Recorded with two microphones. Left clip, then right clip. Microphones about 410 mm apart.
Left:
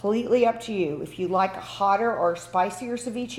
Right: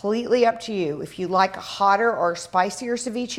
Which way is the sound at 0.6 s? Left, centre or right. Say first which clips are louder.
Right 1 dB; right.